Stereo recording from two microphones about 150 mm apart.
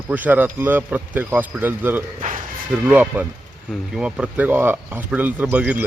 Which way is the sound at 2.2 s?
60° right (ahead or behind).